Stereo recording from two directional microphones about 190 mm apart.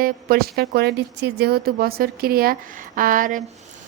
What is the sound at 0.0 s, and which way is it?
Speech, 50° right (ahead or behind).